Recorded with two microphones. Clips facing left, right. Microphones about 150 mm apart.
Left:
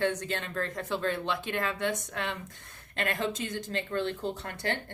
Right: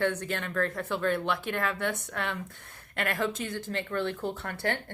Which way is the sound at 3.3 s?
20° left (ahead or behind).